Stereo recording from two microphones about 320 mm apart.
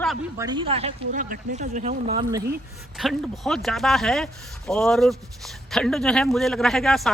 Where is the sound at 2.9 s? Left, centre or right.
Centre.